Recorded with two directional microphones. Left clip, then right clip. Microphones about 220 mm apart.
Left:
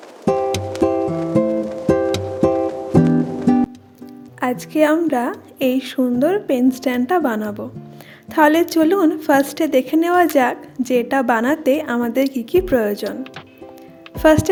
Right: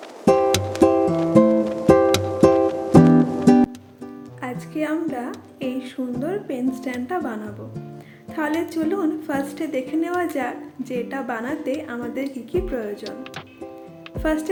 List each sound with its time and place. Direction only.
0.3 s music: centre (ahead or behind)
4.4 s a woman's voice: 50° left (ahead or behind)
14.2 s speech: 45° left (ahead or behind)